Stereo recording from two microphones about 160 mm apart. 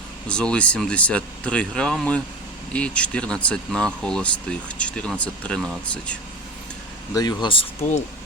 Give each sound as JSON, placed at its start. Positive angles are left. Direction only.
{"t": 0.3, "sound": "speech", "side_deg": 5}
{"t": 7.1, "sound": "speech", "side_deg": 25}